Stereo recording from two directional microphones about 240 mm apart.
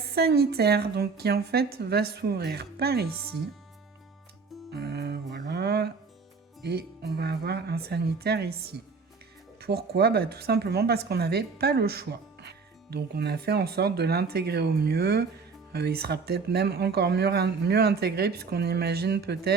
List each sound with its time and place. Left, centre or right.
0.1 s speech: right
4.7 s music: right
6.6 s speech: right